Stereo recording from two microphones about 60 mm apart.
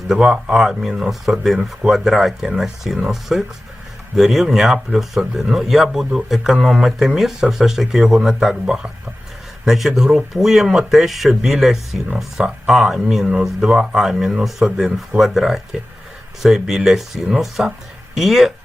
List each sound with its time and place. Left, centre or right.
0.1 s speech: centre
9.6 s speech: centre